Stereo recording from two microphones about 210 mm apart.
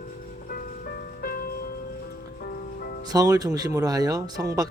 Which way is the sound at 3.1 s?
15° right (ahead or behind).